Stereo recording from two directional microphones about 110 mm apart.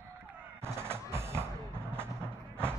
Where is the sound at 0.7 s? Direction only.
25° right (ahead or behind).